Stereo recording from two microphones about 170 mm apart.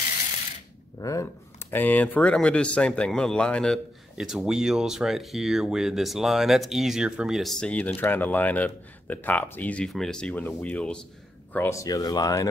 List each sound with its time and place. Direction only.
0.9 s speech: 20° left (ahead or behind)